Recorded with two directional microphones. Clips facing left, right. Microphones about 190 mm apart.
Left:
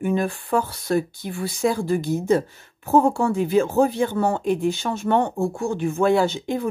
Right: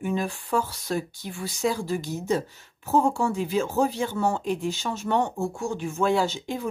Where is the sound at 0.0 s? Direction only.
55° left (ahead or behind).